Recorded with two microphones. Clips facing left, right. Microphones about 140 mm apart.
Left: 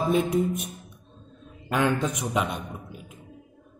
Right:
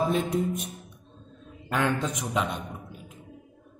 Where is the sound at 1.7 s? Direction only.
10° left (ahead or behind).